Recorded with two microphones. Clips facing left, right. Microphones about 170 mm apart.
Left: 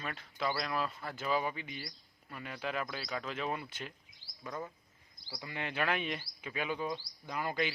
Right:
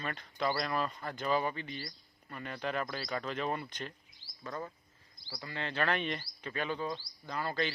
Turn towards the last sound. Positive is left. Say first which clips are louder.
# even
turn(degrees=15)  # may be behind; listen again after turning